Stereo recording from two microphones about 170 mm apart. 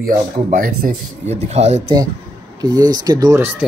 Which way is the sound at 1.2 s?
40° right (ahead or behind).